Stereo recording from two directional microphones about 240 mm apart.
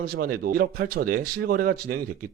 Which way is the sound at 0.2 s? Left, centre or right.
Right.